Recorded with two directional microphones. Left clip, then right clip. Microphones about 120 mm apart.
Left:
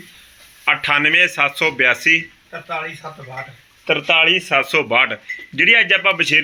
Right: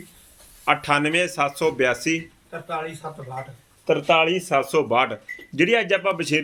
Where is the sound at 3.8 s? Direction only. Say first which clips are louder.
Left 4 dB; 25° right (ahead or behind).